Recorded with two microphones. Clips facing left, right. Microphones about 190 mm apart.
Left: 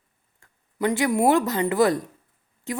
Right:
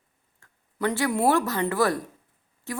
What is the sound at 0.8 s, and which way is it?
A woman's voice, 15° left (ahead or behind).